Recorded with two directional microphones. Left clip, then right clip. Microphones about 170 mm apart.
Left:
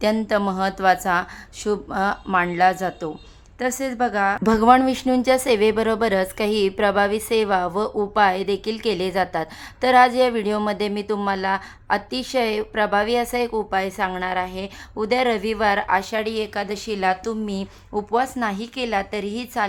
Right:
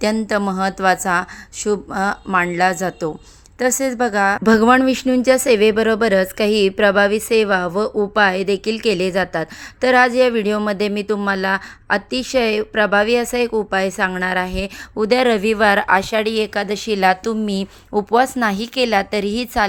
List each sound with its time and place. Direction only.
0.3 s speech: 20° right (ahead or behind)